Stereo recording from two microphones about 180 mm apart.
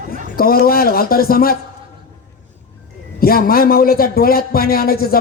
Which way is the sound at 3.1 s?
55° left (ahead or behind).